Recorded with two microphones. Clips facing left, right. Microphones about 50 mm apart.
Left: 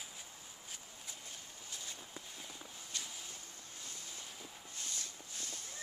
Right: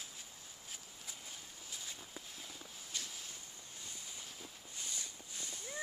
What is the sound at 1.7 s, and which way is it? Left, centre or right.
Walk, centre.